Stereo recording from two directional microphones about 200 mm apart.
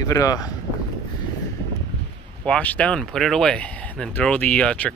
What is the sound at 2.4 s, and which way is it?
Speech, 5° left (ahead or behind).